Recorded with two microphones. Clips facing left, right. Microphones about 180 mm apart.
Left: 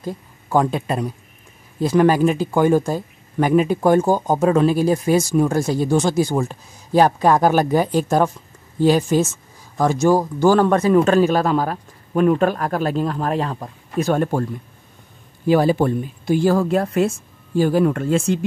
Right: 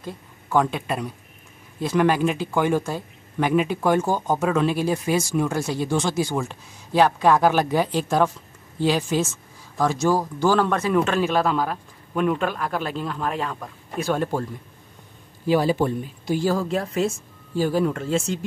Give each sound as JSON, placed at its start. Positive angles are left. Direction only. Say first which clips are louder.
{"t": 0.0, "sound": "speech", "louder": "left 6 dB", "side_deg": 40}
{"t": 15.4, "sound": "a woman's voice", "louder": "left 4 dB", "side_deg": 50}